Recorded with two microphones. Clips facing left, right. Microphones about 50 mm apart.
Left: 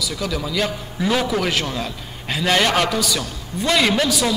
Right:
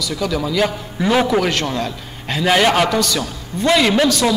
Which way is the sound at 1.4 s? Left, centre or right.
Centre.